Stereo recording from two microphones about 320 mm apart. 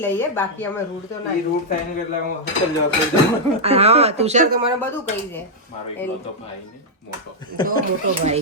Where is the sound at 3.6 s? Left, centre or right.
Centre.